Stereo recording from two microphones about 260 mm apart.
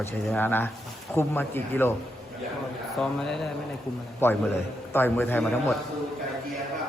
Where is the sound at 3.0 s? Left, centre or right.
Centre.